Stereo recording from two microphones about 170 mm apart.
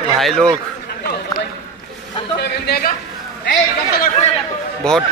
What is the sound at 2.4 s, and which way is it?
Speech, 75° left (ahead or behind).